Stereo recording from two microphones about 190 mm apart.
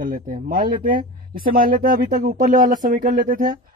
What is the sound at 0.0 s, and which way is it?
Speech, 50° right (ahead or behind).